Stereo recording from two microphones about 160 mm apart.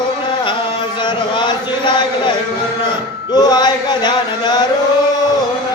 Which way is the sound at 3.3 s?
25° left (ahead or behind).